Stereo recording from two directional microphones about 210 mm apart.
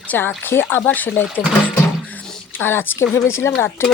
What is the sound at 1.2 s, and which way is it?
Speech, 5° right (ahead or behind).